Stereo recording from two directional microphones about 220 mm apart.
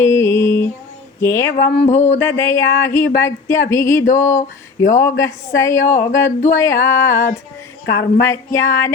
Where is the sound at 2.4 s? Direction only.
10° left (ahead or behind).